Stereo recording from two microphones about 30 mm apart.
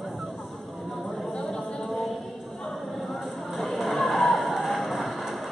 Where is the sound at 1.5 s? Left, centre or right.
Left.